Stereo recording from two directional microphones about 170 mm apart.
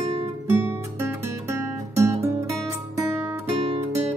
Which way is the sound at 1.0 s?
15° right (ahead or behind).